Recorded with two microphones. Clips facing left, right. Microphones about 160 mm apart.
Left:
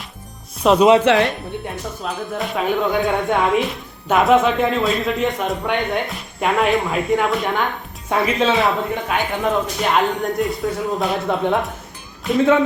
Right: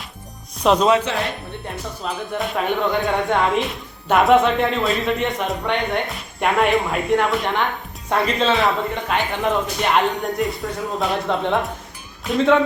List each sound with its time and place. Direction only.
0.6 s speech: centre (ahead or behind)
1.0 s speech: 70° left (ahead or behind)
1.6 s speech: centre (ahead or behind)